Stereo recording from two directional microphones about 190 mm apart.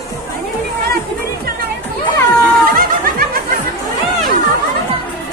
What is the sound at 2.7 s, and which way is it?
Snicker, 50° right (ahead or behind).